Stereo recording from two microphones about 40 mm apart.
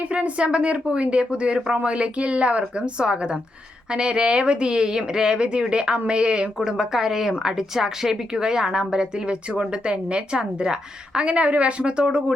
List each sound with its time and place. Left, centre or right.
0.0 s a woman's voice: right
6.7 s a woman's voice: centre